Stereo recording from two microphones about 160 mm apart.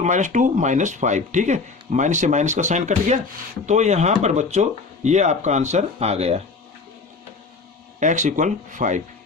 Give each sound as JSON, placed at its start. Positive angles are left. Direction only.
{"t": 0.0, "sound": "speech", "side_deg": -50}
{"t": 7.9, "sound": "speech", "side_deg": -50}